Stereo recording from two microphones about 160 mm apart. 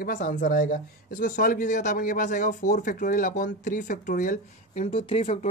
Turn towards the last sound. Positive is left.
turn(degrees=35)  # may be behind; listen again after turning